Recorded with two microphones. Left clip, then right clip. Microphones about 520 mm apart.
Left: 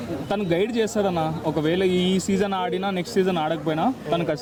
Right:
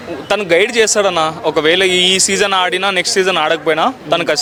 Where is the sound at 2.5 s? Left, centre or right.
Centre.